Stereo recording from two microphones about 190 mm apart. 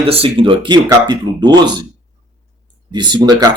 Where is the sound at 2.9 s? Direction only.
25° right (ahead or behind).